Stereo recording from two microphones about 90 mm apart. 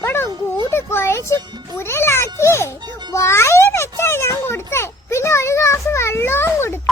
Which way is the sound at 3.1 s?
30° left (ahead or behind).